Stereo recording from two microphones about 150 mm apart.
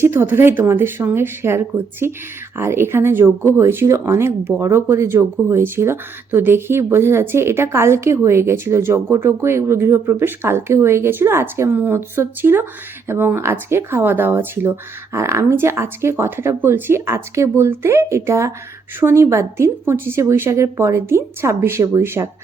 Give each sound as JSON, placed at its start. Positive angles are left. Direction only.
{"t": 0.0, "sound": "speech", "side_deg": -15}